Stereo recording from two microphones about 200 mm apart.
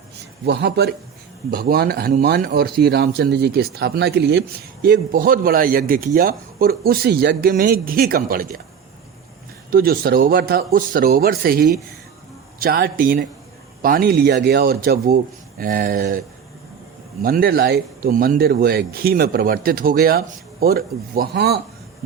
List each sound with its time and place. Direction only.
0.4 s a man's voice: 60° right (ahead or behind)
9.6 s speech: 45° right (ahead or behind)
17.2 s speech: 45° right (ahead or behind)